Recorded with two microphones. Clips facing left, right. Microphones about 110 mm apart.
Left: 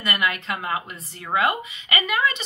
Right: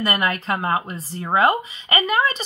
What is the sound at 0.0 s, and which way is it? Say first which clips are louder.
A woman's voice: right 3 dB; 40° right (ahead or behind).